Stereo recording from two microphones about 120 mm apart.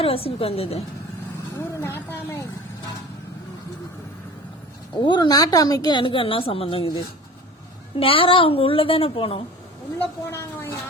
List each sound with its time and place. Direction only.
0.0 s a woman's voice: 50° left (ahead or behind)
1.5 s speech: 20° left (ahead or behind)
4.9 s a woman's voice: 40° left (ahead or behind)
7.9 s a woman's voice: 50° left (ahead or behind)
10.0 s speech: 20° left (ahead or behind)